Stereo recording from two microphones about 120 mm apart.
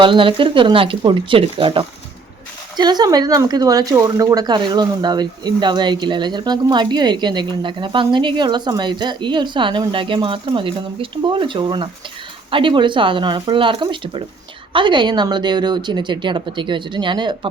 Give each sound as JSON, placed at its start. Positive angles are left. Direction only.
{"t": 0.0, "sound": "speech", "side_deg": -45}